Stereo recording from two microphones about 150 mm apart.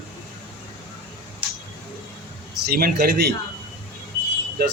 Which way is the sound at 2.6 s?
90° right.